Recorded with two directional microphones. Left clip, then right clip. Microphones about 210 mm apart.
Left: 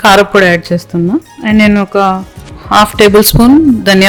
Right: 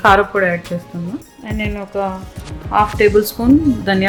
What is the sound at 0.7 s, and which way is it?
Speech, 65° left (ahead or behind).